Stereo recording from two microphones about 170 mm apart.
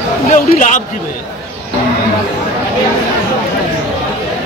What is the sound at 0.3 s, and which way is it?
Speech, 45° left (ahead or behind).